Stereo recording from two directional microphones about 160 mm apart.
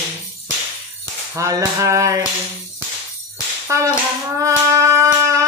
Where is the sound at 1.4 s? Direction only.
20° right (ahead or behind).